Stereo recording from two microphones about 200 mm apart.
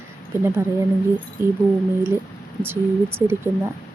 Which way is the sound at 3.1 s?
10° right (ahead or behind).